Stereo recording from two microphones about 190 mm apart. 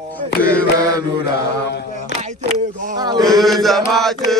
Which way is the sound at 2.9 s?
20° right (ahead or behind).